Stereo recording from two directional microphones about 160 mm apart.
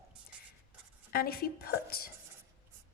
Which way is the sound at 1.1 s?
70° left (ahead or behind).